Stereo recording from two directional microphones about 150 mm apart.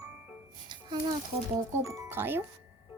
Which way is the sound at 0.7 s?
30° right (ahead or behind).